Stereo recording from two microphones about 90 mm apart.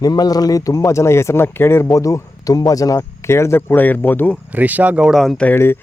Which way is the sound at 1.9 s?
40° left (ahead or behind).